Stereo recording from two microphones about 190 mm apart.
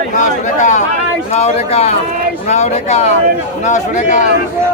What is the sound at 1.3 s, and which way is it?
A man's voice, 35° left (ahead or behind).